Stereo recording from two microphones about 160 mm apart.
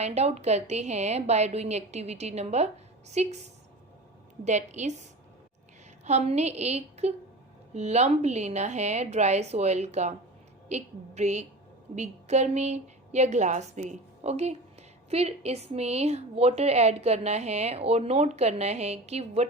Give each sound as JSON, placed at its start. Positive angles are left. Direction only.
{"t": 0.0, "sound": "a woman's voice", "side_deg": -40}
{"t": 6.1, "sound": "a woman's voice", "side_deg": -45}